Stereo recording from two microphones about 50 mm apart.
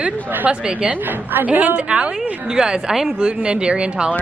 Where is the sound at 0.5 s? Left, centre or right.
Right.